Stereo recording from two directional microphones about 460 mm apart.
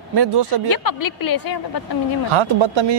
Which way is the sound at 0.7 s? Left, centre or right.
Left.